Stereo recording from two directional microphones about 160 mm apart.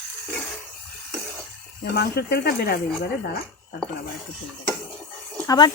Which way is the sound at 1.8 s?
90° left.